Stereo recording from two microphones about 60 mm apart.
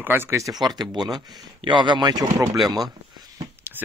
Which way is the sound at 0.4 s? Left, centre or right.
Right.